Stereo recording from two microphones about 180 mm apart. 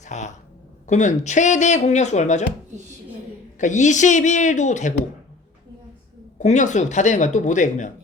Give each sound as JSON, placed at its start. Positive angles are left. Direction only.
{"t": 0.0, "sound": "speech", "side_deg": 40}
{"t": 3.6, "sound": "speech", "side_deg": 40}
{"t": 6.4, "sound": "speech", "side_deg": 40}